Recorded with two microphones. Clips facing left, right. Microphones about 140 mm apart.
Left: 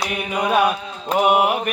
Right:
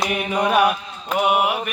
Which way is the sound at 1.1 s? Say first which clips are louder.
Left 2 dB; 25° left (ahead or behind).